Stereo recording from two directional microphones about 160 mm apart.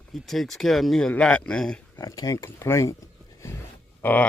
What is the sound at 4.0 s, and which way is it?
Speech, 10° left (ahead or behind).